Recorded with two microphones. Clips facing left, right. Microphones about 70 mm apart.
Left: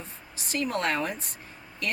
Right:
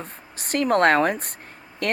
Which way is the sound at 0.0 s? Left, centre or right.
Right.